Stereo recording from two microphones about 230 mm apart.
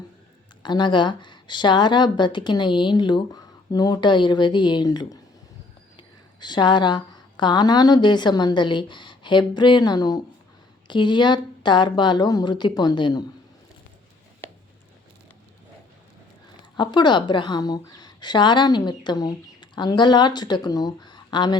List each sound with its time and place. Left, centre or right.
0.6 s a woman's voice: centre
16.7 s speech: centre